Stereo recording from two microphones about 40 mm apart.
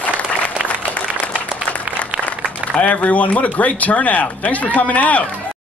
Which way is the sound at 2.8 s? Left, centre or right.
Left.